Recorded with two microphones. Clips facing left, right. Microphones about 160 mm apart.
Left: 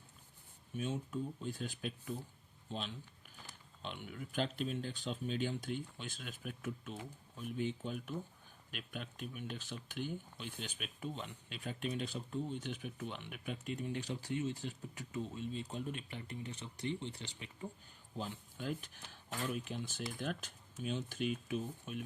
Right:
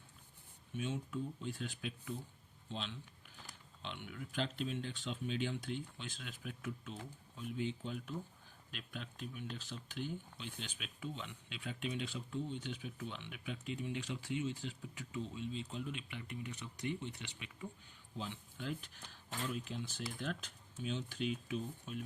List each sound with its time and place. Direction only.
0.8 s speech: 40° left (ahead or behind)
2.6 s a sound: 45° left (ahead or behind)
3.8 s speech: 45° left (ahead or behind)
18.2 s speech: 45° left (ahead or behind)